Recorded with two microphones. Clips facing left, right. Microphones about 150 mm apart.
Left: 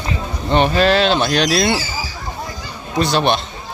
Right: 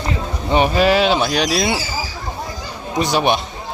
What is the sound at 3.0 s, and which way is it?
Speech, 15° right (ahead or behind).